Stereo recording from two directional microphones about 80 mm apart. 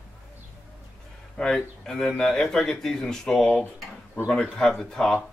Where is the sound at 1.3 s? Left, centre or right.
Centre.